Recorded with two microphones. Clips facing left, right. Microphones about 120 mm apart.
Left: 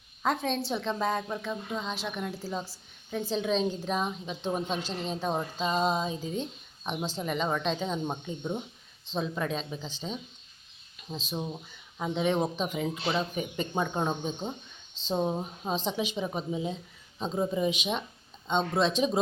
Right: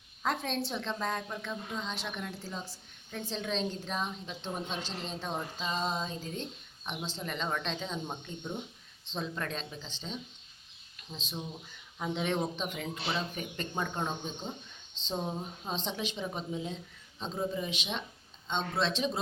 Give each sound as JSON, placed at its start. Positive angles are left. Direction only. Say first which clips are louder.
{"t": 0.2, "sound": "a woman's voice", "louder": "left 4 dB", "side_deg": 0}
{"t": 8.0, "sound": "speech", "louder": "left 6 dB", "side_deg": 25}
{"t": 9.0, "sound": "speech", "louder": "left 5 dB", "side_deg": 10}
{"t": 11.3, "sound": "speech", "louder": "left 6 dB", "side_deg": 40}
{"t": 11.9, "sound": "a woman's voice", "louder": "left 5 dB", "side_deg": 5}
{"t": 15.7, "sound": "speech", "louder": "left 6 dB", "side_deg": 10}